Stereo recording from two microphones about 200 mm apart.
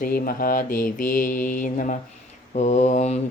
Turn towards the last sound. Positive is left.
turn(degrees=35)  # may be behind; listen again after turning